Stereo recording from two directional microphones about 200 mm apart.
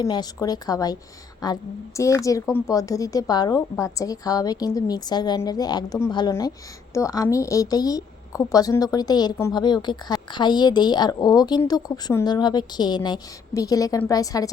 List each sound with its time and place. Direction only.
0.0 s a woman's voice: 20° left (ahead or behind)
2.0 s a woman's voice: 15° left (ahead or behind)